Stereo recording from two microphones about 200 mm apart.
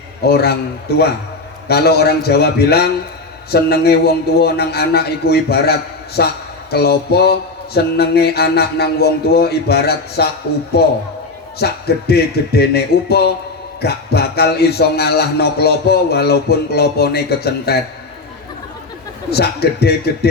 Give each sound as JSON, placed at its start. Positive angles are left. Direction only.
{"t": 0.3, "sound": "speech", "side_deg": 50}
{"t": 1.6, "sound": "speech", "side_deg": 55}
{"t": 19.3, "sound": "speech", "side_deg": 55}